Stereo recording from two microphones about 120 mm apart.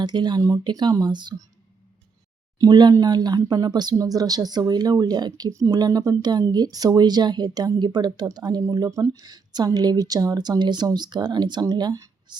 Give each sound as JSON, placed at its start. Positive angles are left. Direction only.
{"t": 0.0, "sound": "speech", "side_deg": -35}
{"t": 2.6, "sound": "speech", "side_deg": -35}